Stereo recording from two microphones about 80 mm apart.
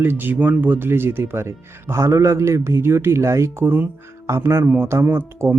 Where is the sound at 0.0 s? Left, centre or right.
Right.